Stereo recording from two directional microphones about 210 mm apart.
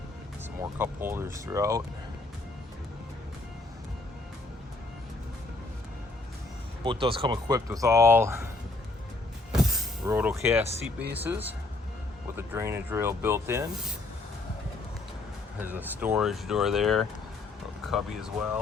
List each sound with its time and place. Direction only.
0.6 s speech: 10° right (ahead or behind)
6.8 s speech: 25° right (ahead or behind)
9.5 s music: centre (ahead or behind)
10.1 s speech: 10° right (ahead or behind)
15.6 s speech: 10° right (ahead or behind)